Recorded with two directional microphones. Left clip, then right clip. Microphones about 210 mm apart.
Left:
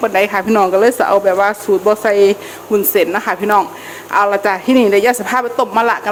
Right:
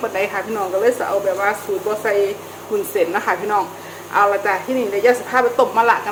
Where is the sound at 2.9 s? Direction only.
45° left (ahead or behind).